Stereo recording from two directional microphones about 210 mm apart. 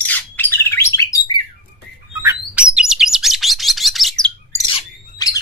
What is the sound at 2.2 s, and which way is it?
Bird, 10° right (ahead or behind).